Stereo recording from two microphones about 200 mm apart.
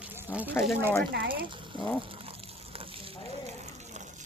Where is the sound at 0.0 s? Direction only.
10° right (ahead or behind).